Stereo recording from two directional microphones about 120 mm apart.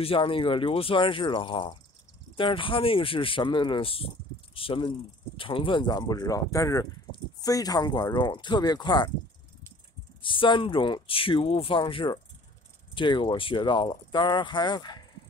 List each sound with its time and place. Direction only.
0.0 s speech: 50° left (ahead or behind)
10.2 s speech: 45° left (ahead or behind)